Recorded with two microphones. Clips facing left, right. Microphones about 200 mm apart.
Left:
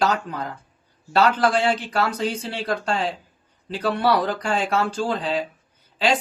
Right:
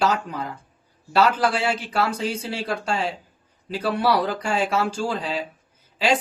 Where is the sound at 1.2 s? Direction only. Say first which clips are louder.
Left 1 dB; 5° right (ahead or behind).